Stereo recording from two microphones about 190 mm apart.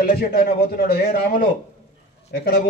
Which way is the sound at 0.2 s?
55° left (ahead or behind).